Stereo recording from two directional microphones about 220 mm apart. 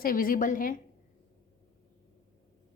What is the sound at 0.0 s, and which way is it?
Speech, 40° left (ahead or behind).